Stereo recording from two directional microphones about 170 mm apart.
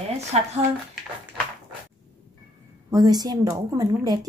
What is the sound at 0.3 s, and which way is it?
Speech, 35° right (ahead or behind).